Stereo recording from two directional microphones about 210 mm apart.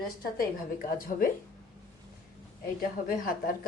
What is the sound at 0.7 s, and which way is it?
Speech, 40° left (ahead or behind).